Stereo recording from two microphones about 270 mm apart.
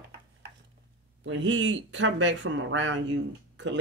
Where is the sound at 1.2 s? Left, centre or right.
Right.